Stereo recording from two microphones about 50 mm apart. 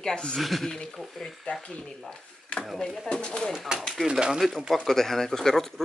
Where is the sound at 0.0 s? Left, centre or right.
Centre.